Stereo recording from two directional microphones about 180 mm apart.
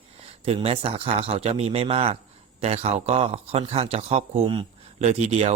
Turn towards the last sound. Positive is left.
turn(degrees=-35)  # may be behind; listen again after turning